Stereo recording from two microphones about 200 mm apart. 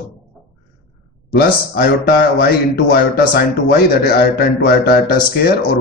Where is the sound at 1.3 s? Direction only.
50° left (ahead or behind).